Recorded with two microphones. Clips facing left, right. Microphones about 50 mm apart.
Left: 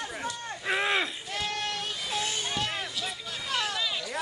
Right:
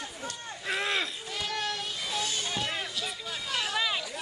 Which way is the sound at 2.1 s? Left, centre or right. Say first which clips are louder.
Left 1 dB; left.